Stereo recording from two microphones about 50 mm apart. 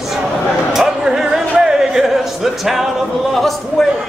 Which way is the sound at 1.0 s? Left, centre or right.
Centre.